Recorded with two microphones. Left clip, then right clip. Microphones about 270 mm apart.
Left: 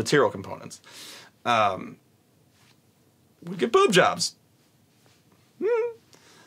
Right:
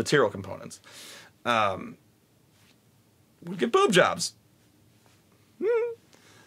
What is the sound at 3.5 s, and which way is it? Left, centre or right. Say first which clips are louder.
Speech: left 2 dB; right.